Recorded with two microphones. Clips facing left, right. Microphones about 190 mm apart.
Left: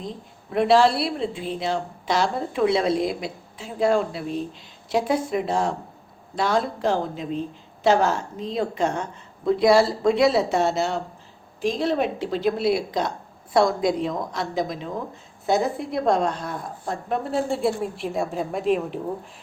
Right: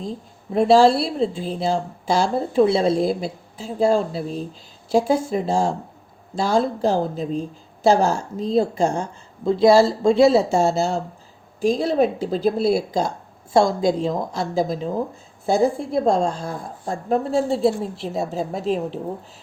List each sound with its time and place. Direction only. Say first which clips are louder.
0.5 s a woman's voice: right 4 dB; 30° right (ahead or behind)